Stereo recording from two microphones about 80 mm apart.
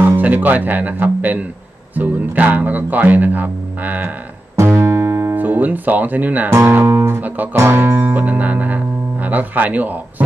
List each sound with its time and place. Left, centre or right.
0.0 s speech: right
4.6 s music: right
5.3 s speech: right
6.5 s speech: right
7.2 s speech: right
7.5 s speech: right
8.2 s speech: centre